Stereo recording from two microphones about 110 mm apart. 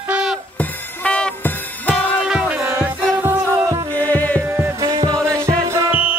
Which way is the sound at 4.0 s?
15° left (ahead or behind).